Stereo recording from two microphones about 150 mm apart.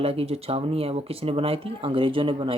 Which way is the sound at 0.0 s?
40° right (ahead or behind).